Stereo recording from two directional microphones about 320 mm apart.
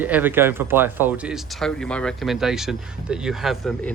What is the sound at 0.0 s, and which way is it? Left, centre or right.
Speech, centre.